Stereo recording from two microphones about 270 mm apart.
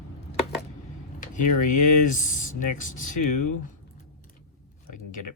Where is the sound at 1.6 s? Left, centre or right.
Left.